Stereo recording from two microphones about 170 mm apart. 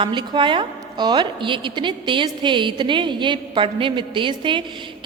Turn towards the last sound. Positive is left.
turn(degrees=-30)  # may be behind; listen again after turning